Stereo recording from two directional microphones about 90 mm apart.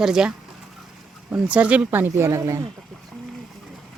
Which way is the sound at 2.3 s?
40° right (ahead or behind).